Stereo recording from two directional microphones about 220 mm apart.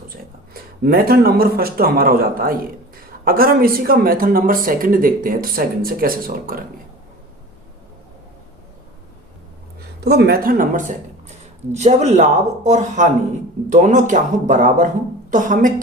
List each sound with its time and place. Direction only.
0.1 s speech: 40° right (ahead or behind)
10.0 s speech: 50° right (ahead or behind)